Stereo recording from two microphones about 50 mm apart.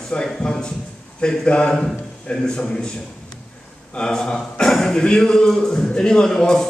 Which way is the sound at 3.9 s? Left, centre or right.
Centre.